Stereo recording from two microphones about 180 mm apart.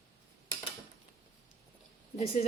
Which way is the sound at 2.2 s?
35° left (ahead or behind).